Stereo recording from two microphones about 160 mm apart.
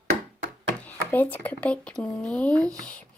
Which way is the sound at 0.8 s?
10° left (ahead or behind).